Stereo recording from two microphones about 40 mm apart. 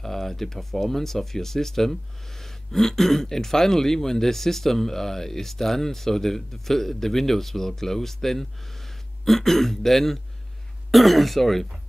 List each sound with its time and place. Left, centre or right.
0.0 s speech: centre